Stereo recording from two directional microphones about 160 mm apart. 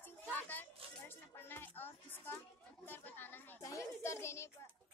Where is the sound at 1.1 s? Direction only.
15° left (ahead or behind).